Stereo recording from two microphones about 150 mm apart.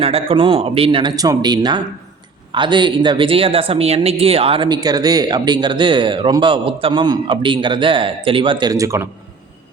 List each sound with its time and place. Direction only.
0.0 s speech: 40° right (ahead or behind); by 9.0 s 20° right (ahead or behind)